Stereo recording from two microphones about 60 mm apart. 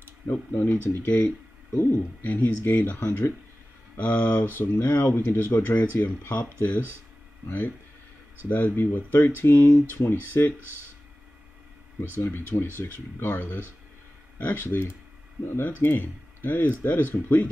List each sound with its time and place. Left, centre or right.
0.3 s speech: left
4.6 s speech: left
6.3 s speech: left
12.2 s speech: left